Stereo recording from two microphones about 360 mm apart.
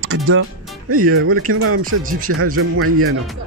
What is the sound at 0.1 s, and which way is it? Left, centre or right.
Speech, right.